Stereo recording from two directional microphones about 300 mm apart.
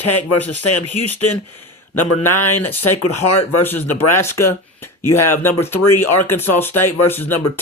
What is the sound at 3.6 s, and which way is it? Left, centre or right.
Speech, centre.